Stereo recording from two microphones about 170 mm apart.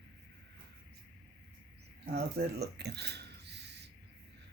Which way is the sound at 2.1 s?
75° right (ahead or behind).